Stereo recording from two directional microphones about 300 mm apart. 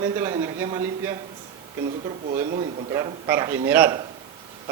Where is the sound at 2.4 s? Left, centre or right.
Right.